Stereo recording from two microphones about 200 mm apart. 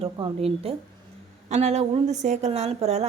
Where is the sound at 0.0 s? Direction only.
30° right (ahead or behind).